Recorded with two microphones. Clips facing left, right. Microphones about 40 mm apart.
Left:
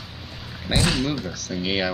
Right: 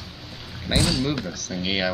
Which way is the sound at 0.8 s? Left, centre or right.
Left.